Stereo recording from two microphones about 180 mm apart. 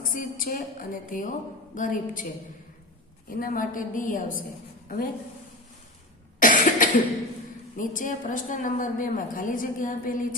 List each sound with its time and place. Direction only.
0.1 s a woman's voice: 50° left (ahead or behind)
3.2 s a woman's voice: 50° left (ahead or behind)
6.4 s cough: 50° left (ahead or behind)
7.8 s a woman's voice: 50° left (ahead or behind)